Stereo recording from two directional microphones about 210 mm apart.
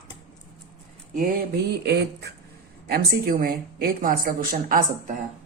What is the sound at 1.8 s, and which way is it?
A woman's voice, 50° right (ahead or behind).